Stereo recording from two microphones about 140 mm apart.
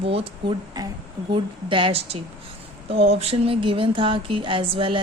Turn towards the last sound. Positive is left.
turn(degrees=-40)  # may be behind; listen again after turning